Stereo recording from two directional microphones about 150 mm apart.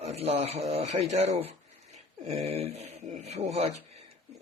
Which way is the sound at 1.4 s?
40° right (ahead or behind).